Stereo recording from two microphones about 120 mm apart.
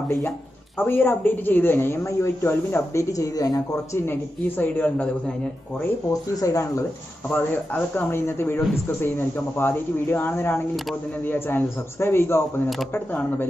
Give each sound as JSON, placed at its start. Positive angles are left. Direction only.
{"t": 0.7, "sound": "speech", "side_deg": 15}
{"t": 5.8, "sound": "speech", "side_deg": 25}